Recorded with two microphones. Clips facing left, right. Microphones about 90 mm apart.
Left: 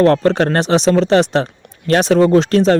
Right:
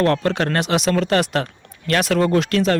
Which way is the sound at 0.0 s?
30° left (ahead or behind).